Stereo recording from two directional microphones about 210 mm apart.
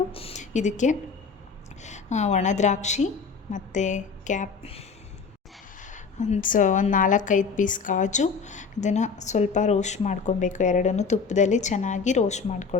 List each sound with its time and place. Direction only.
0.1 s a woman's voice: 25° left (ahead or behind)
5.8 s a woman's voice: 35° left (ahead or behind)